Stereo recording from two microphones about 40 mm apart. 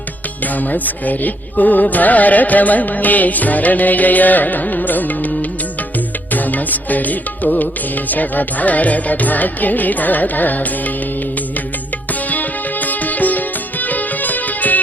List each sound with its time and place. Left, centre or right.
0.5 s music: left
12.3 s music: left